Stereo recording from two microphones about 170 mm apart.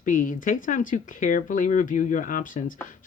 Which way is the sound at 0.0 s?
50° left (ahead or behind).